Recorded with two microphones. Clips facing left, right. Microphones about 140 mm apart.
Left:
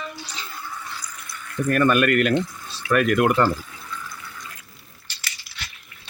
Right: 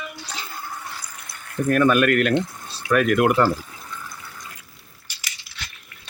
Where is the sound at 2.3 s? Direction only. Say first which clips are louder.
Right 1 dB; 30° right (ahead or behind).